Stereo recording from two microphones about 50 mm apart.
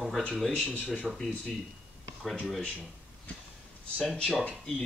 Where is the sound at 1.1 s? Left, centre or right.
Centre.